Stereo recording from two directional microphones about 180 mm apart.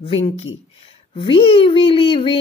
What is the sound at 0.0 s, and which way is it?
A child's voice, 30° left (ahead or behind).